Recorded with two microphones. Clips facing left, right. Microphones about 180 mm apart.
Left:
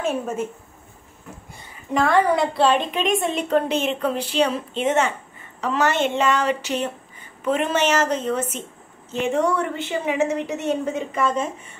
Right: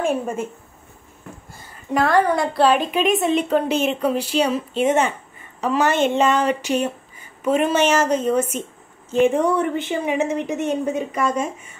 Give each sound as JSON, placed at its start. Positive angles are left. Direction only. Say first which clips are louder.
{"t": 0.0, "sound": "a woman's voice", "louder": "right 2 dB", "side_deg": -10}
{"t": 1.5, "sound": "a woman's voice", "louder": "right 2 dB", "side_deg": 0}